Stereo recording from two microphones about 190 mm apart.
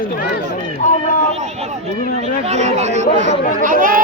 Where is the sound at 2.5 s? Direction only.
35° right (ahead or behind).